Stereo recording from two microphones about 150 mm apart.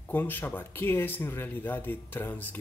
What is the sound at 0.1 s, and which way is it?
Speech, 15° left (ahead or behind).